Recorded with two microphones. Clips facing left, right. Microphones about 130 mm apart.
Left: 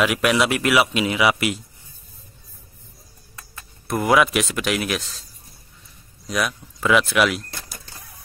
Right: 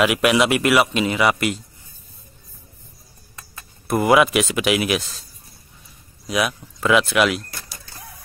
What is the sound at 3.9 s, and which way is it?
Speech, 5° right (ahead or behind).